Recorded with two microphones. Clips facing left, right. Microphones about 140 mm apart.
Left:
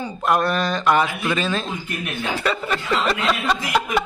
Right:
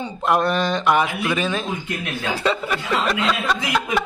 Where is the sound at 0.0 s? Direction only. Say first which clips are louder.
Right 1 dB; 20° right (ahead or behind).